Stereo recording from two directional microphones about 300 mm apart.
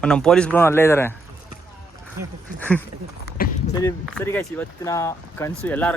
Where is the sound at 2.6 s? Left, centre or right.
Centre.